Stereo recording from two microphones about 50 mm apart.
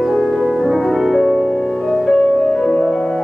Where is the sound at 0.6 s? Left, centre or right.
Centre.